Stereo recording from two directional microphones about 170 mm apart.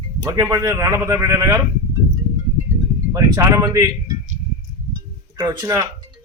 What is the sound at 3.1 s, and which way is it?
Speech, 15° right (ahead or behind).